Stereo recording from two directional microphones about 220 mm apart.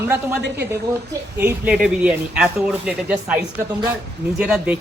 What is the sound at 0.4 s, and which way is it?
Speech, 50° right (ahead or behind).